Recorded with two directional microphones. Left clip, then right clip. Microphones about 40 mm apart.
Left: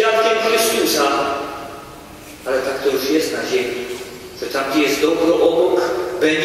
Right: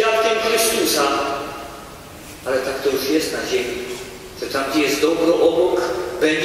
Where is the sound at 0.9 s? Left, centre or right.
Centre.